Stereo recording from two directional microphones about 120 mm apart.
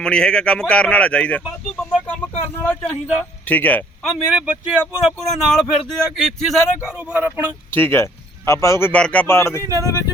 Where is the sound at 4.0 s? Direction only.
10° right (ahead or behind).